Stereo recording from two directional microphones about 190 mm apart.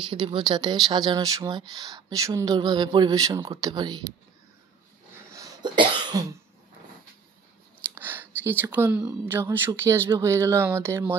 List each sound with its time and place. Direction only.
0.1 s speech: 25° right (ahead or behind)
5.3 s cough: 20° right (ahead or behind)
7.9 s a sound: 10° right (ahead or behind)
9.0 s speech: 10° right (ahead or behind)